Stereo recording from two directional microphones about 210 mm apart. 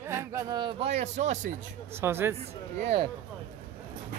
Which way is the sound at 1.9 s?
10° right (ahead or behind).